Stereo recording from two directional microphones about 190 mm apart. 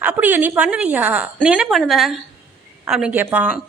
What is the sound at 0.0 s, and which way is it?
A woman's voice, 10° right (ahead or behind).